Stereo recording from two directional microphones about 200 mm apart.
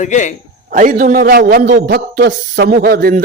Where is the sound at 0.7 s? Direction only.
45° right (ahead or behind).